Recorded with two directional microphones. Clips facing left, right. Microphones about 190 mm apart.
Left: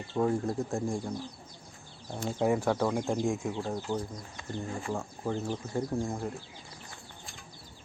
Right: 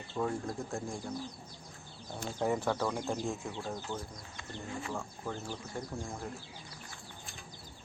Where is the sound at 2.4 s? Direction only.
10° left (ahead or behind).